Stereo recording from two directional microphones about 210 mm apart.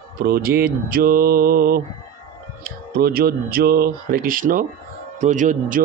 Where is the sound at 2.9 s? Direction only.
45° right (ahead or behind).